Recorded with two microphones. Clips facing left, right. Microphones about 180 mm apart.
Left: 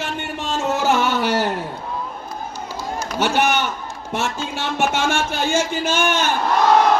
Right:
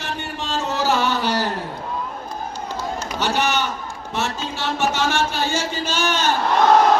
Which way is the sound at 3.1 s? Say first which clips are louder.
Left 4 dB; 50° left (ahead or behind).